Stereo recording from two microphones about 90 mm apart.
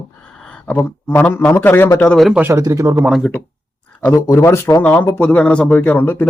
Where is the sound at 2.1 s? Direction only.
Centre (ahead or behind).